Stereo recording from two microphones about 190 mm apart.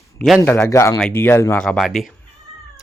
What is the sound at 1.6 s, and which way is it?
Speech, centre (ahead or behind).